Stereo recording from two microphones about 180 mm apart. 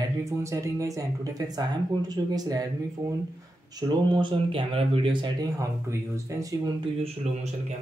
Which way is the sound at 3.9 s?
25° right (ahead or behind).